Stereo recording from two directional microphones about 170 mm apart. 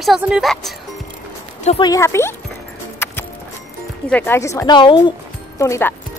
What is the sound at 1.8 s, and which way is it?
Speech, 20° left (ahead or behind).